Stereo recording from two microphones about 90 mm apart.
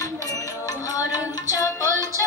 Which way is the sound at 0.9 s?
40° left (ahead or behind).